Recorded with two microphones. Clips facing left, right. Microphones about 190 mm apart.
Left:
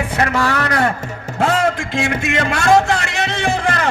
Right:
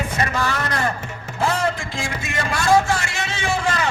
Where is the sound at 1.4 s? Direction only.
70° left (ahead or behind).